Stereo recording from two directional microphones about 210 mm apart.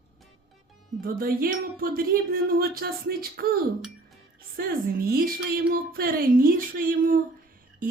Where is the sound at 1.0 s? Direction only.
45° right (ahead or behind).